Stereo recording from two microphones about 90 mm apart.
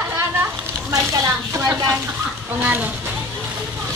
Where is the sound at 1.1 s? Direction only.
40° right (ahead or behind).